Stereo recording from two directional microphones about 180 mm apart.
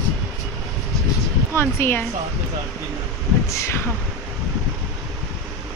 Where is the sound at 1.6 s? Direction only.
15° left (ahead or behind).